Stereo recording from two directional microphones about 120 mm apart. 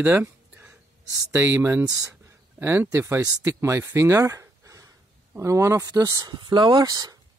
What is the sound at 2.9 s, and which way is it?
Speech, 25° right (ahead or behind).